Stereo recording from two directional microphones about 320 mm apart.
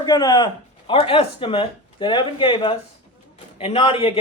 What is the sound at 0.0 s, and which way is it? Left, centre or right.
Speech, centre.